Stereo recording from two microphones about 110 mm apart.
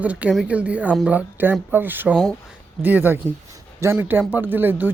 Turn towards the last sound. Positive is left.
turn(degrees=-20)  # may be behind; listen again after turning